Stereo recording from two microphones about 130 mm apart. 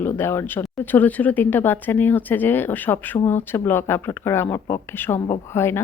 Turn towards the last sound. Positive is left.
turn(degrees=20)  # may be behind; listen again after turning